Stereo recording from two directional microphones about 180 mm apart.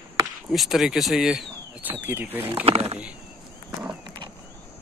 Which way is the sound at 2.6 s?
35° right (ahead or behind).